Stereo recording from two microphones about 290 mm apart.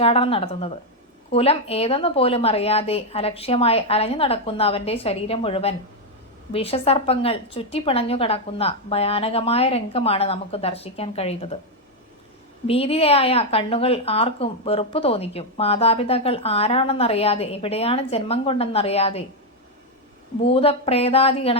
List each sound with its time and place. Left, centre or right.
0.0 s a woman's voice: centre
12.6 s a woman's voice: centre
20.4 s a woman's voice: centre